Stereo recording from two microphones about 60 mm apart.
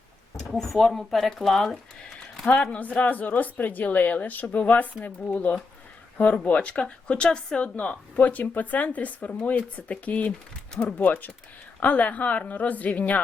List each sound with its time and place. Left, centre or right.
0.3 s speech: centre; by 13.1 s left